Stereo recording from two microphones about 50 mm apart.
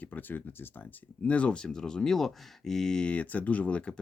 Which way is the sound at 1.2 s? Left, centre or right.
Left.